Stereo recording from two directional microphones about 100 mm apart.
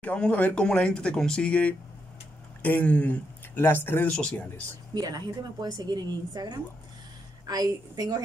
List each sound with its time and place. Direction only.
0.0 s speech: 15° left (ahead or behind)
4.1 s speech: 10° left (ahead or behind)
4.9 s a woman's voice: 40° right (ahead or behind)